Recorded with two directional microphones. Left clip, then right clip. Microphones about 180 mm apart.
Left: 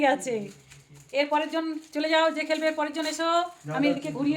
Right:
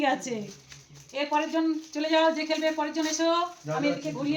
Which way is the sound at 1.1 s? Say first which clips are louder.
Left 2 dB; 60° left (ahead or behind).